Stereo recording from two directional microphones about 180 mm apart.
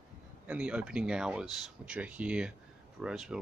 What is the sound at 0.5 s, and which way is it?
Speech, 5° right (ahead or behind).